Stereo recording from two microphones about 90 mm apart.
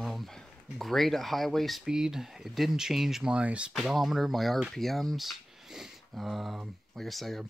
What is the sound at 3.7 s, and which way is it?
Speech, centre (ahead or behind).